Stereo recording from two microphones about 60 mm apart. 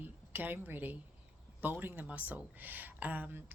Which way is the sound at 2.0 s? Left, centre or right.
Right.